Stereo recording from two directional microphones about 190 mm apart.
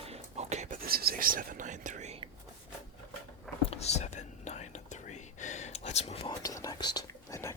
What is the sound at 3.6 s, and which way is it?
Whispering, 35° left (ahead or behind).